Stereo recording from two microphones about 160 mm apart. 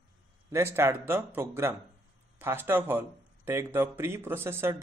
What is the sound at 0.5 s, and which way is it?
Speech, 15° right (ahead or behind).